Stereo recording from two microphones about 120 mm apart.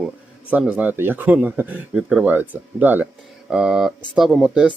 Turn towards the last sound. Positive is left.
turn(degrees=-5)  # may be behind; listen again after turning